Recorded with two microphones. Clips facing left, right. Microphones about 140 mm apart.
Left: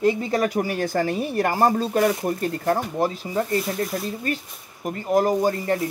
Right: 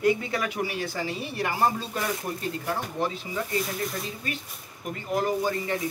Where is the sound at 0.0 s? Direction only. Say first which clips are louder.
Left 4 dB; 30° left (ahead or behind).